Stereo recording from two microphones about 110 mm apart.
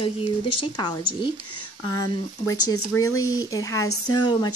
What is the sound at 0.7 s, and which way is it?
Speech, 45° left (ahead or behind).